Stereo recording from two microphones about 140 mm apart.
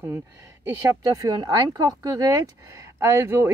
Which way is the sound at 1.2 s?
25° right (ahead or behind).